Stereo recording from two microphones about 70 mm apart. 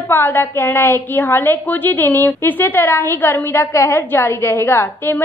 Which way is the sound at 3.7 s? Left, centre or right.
Left.